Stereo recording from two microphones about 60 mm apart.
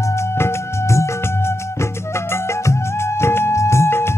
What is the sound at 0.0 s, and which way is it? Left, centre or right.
Music, left.